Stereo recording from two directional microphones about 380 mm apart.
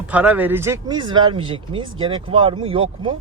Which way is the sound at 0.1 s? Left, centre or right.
Centre.